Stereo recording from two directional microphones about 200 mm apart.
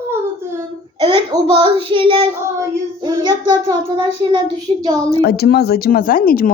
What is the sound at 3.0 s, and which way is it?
Child singing, 20° right (ahead or behind).